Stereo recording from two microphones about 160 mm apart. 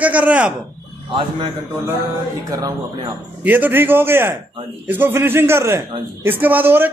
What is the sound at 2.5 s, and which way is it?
Speech, 25° right (ahead or behind).